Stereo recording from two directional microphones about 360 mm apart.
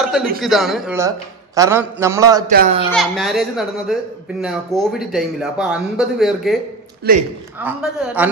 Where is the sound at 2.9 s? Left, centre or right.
Centre.